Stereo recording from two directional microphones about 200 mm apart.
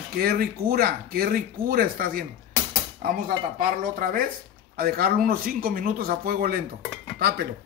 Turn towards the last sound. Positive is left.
turn(degrees=-50)  # may be behind; listen again after turning